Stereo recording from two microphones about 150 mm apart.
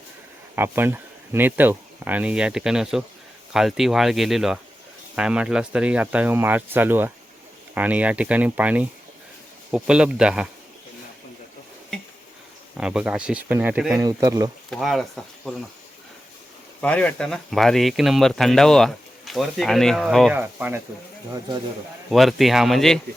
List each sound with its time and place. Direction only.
0.5 s speech: 15° right (ahead or behind)
12.7 s speech: 5° right (ahead or behind)
13.9 s speech: 25° right (ahead or behind)
14.7 s speech: centre (ahead or behind)
16.8 s speech: 10° left (ahead or behind)
20.3 s speech: 15° right (ahead or behind)
22.1 s speech: centre (ahead or behind)